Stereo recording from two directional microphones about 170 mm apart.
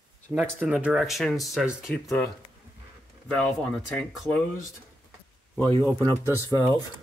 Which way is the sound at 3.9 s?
Centre (ahead or behind).